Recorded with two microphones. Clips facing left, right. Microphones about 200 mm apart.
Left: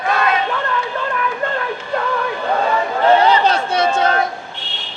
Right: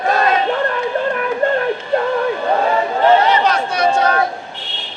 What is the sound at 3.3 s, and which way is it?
Chatter, 30° left (ahead or behind).